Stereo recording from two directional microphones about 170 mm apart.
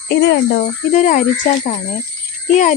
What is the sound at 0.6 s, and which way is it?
Speech, 45° left (ahead or behind).